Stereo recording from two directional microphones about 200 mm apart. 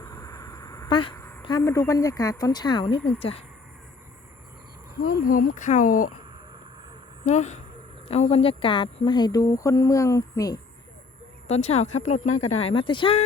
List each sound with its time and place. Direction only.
0.0 s a sound: 15° left (ahead or behind)
1.4 s speech: 20° left (ahead or behind)
5.0 s speech: 45° left (ahead or behind)
7.3 s speech: 35° left (ahead or behind); by 10.6 s 15° left (ahead or behind)
11.4 s speech: 30° left (ahead or behind)